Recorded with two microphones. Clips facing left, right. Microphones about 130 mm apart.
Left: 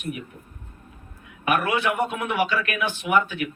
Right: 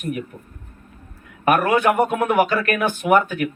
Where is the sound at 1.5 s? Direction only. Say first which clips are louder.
Right 6 dB; 45° right (ahead or behind).